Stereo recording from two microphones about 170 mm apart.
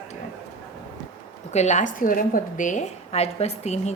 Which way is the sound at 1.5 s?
45° left (ahead or behind).